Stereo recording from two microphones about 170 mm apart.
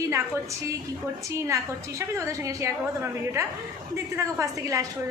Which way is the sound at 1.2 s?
20° right (ahead or behind).